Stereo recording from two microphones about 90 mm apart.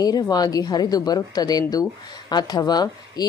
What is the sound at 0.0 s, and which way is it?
A woman's voice, 45° left (ahead or behind).